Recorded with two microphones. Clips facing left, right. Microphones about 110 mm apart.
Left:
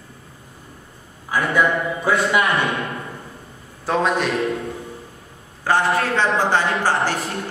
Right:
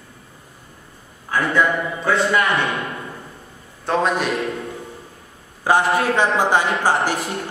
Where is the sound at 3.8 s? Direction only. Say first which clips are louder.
Even; centre (ahead or behind).